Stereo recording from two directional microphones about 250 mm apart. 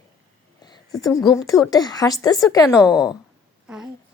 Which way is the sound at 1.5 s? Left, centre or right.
Centre.